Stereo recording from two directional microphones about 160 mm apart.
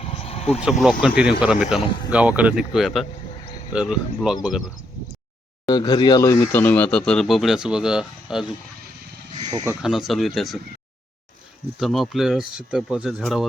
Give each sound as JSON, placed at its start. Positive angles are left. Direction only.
{"t": 0.0, "sound": "a sound", "side_deg": 40}
{"t": 0.6, "sound": "speech", "side_deg": 0}
{"t": 3.3, "sound": "a sound", "side_deg": 40}
{"t": 3.7, "sound": "speech", "side_deg": -5}
{"t": 5.6, "sound": "speech", "side_deg": 25}
{"t": 9.4, "sound": "speech", "side_deg": -25}
{"t": 9.8, "sound": "speech", "side_deg": -5}
{"t": 11.8, "sound": "speech", "side_deg": 0}